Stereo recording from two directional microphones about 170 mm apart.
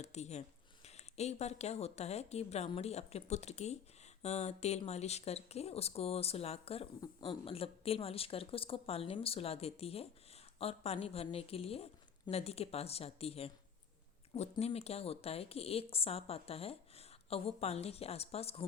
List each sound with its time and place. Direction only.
0.0 s a woman's voice: 40° left (ahead or behind)
14.6 s a woman's voice: 40° left (ahead or behind)